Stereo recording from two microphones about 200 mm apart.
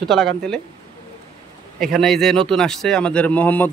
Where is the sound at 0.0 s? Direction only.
Centre (ahead or behind).